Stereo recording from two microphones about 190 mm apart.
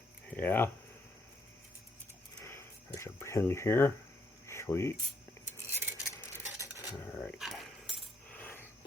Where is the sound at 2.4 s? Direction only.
15° left (ahead or behind).